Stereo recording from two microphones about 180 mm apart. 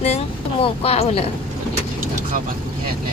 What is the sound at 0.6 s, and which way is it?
Speech, 35° left (ahead or behind).